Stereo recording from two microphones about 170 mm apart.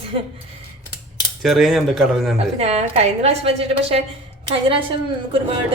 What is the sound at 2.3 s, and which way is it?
A woman's voice, 35° right (ahead or behind).